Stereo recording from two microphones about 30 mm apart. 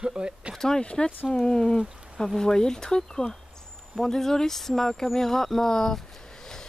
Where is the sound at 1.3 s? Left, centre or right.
Left.